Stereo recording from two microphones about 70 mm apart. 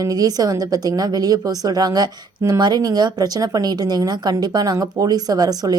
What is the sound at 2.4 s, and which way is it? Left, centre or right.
A woman's voice, right.